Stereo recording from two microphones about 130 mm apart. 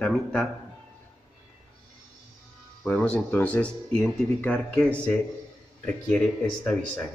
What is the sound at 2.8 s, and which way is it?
Speech, 10° left (ahead or behind).